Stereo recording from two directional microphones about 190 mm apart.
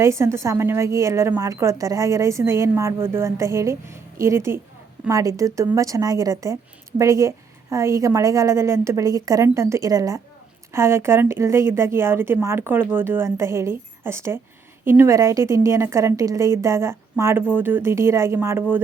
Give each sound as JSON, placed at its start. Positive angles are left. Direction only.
{"t": 0.0, "sound": "speech", "side_deg": -15}